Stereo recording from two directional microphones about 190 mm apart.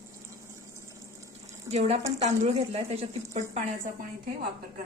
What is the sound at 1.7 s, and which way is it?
Speech, 35° right (ahead or behind).